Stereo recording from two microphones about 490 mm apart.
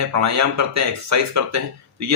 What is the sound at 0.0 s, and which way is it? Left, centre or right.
Speech, right.